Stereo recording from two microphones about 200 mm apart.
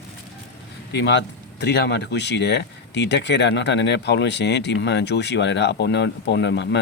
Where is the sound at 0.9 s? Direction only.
60° left (ahead or behind).